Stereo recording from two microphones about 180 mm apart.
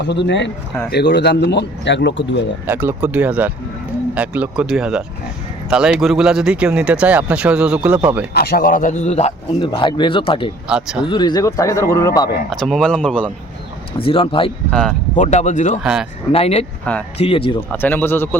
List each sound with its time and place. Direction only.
0.0 s speech: 70° left (ahead or behind)
0.9 s speech: 70° left (ahead or behind)
2.6 s speech: 10° right (ahead or behind)
8.3 s a man's voice: 60° left (ahead or behind); by 9.6 s 35° left (ahead or behind)
9.6 s a man's voice: 25° left (ahead or behind)
10.7 s speech: 5° right (ahead or behind)
11.0 s a man's voice: 25° left (ahead or behind)
12.5 s speech: centre (ahead or behind)
14.0 s a man's voice: 30° left (ahead or behind)
14.7 s speech: 5° left (ahead or behind)
15.1 s a man's voice: 40° left (ahead or behind)
15.8 s speech: 5° right (ahead or behind)
16.3 s speech: 35° left (ahead or behind)
17.7 s speech: 10° left (ahead or behind)